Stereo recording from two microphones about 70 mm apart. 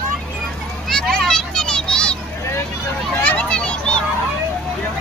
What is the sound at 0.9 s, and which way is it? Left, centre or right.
Children playing, centre.